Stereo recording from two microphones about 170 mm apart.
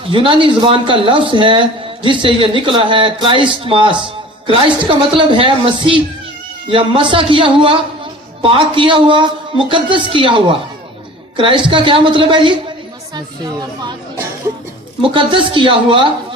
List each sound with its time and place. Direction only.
0.1 s speech: 30° right (ahead or behind)
15.0 s speech: 30° right (ahead or behind)